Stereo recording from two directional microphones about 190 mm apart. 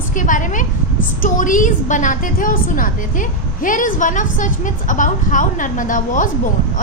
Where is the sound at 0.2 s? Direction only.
45° left (ahead or behind).